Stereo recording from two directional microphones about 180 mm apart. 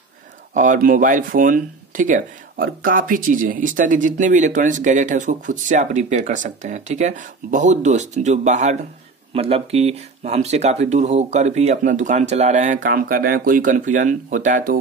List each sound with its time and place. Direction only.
0.6 s speech: 50° right (ahead or behind)